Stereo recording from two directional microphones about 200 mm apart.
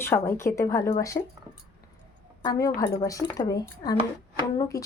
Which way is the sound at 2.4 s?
15° left (ahead or behind).